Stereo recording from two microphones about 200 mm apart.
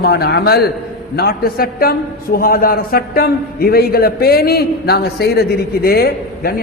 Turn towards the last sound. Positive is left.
turn(degrees=50)  # may be behind; listen again after turning